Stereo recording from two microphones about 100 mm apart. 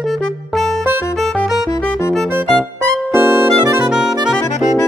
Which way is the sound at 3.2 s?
20° right (ahead or behind).